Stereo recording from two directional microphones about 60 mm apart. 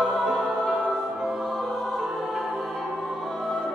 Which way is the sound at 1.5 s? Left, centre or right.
Centre.